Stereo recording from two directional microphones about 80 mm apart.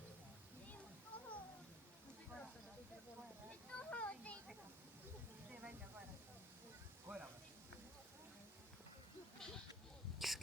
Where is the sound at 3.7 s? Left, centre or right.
Centre.